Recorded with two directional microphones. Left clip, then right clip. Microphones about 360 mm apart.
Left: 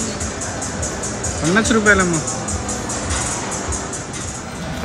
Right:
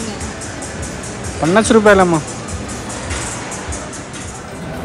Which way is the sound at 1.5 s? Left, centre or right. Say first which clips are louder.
Right 5 dB; centre.